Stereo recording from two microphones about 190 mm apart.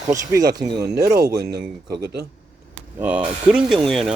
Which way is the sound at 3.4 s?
5° right (ahead or behind).